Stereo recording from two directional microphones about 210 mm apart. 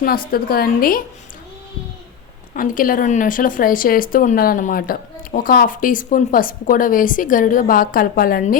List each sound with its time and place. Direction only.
0.3 s a woman's voice: 45° left (ahead or behind)
2.6 s speech: 40° left (ahead or behind)